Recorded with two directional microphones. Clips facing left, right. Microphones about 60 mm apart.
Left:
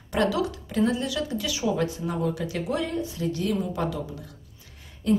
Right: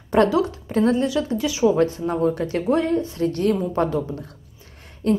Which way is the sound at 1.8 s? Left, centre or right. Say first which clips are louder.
Right 7 dB; right.